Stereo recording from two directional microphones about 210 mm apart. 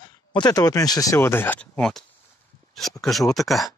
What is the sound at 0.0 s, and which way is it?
Speech, 20° left (ahead or behind).